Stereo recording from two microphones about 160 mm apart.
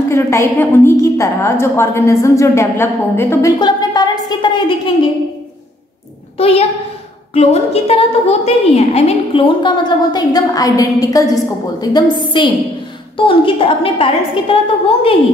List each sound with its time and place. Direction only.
0.1 s a woman's voice: 20° left (ahead or behind)
3.5 s a sound: 25° left (ahead or behind)
6.3 s a child's voice: 40° left (ahead or behind)